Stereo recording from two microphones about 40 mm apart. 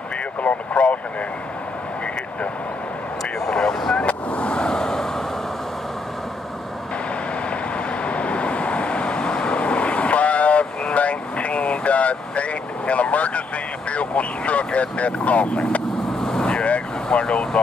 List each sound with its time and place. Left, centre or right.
0.4 s vehicle: left
3.3 s vehicle: centre
8.0 s vehicle: left
16.2 s vehicle: centre
16.4 s vehicle: left